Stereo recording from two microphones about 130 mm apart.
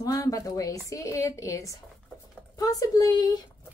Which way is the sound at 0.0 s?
25° left (ahead or behind).